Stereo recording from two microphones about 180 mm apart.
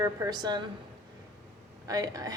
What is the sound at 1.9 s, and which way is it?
Speech, 20° right (ahead or behind).